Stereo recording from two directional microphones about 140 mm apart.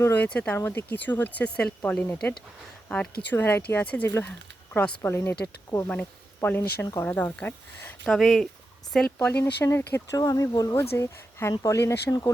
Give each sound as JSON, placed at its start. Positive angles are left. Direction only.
{"t": 0.0, "sound": "speech", "side_deg": 10}
{"t": 8.0, "sound": "speech", "side_deg": 0}